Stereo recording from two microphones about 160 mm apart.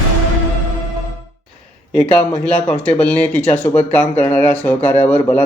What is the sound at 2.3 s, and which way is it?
Speech, 5° left (ahead or behind).